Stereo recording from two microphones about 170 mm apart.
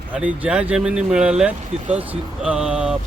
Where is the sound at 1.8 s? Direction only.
40° right (ahead or behind).